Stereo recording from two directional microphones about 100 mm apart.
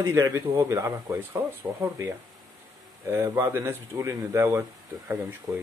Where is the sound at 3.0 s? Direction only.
25° right (ahead or behind).